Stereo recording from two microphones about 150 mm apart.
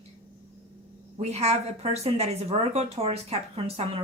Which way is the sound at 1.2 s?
45° right (ahead or behind).